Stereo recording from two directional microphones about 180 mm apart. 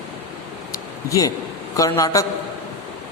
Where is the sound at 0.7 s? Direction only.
20° left (ahead or behind).